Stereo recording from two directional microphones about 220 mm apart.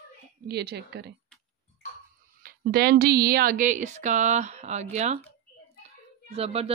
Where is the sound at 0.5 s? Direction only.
45° right (ahead or behind).